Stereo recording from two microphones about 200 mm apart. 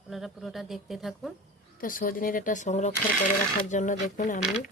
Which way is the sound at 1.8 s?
45° left (ahead or behind).